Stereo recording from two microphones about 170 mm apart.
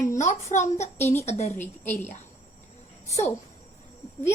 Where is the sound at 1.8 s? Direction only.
15° left (ahead or behind).